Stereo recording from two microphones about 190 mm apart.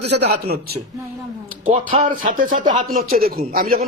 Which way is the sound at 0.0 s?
60° right (ahead or behind).